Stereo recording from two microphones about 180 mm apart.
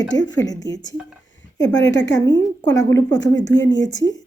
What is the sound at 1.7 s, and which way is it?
Speech, 85° left.